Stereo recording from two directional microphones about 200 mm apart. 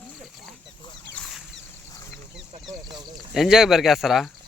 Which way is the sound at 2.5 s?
20° right (ahead or behind).